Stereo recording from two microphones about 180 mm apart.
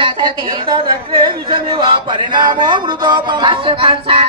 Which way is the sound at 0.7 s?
30° right (ahead or behind).